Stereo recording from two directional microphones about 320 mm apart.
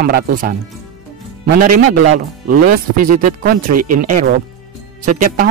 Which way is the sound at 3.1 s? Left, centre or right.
Right.